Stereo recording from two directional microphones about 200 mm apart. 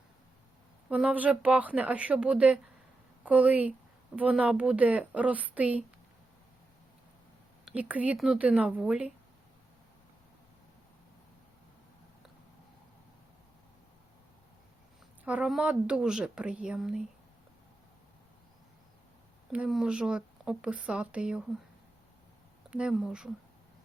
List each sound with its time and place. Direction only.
0.9 s a woman's voice: 5° right (ahead or behind)
7.6 s a woman's voice: 5° right (ahead or behind)
15.2 s a woman's voice: 5° right (ahead or behind)
19.5 s a woman's voice: 5° right (ahead or behind)
22.7 s a woman's voice: 5° right (ahead or behind)